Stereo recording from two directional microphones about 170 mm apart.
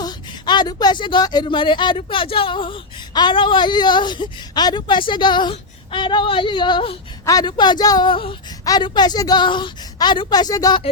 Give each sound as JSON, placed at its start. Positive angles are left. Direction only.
{"t": 0.0, "sound": "speech", "side_deg": 25}